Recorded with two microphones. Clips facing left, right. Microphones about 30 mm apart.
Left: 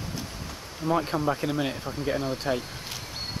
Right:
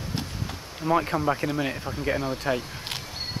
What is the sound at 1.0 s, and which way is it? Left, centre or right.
Speech, centre.